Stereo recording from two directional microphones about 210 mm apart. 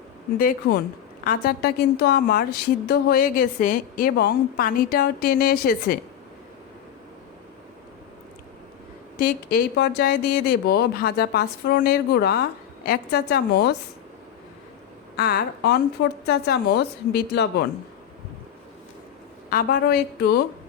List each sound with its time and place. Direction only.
0.3 s a woman's voice: 45° left (ahead or behind)
9.1 s a woman's voice: 45° left (ahead or behind)
15.1 s a woman's voice: 45° left (ahead or behind)
19.5 s a woman's voice: 45° left (ahead or behind)